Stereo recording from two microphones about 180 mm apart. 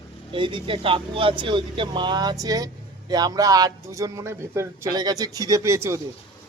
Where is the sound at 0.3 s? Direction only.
30° right (ahead or behind).